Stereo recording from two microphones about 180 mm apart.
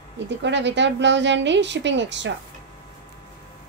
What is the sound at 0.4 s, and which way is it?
A woman's voice, 85° right.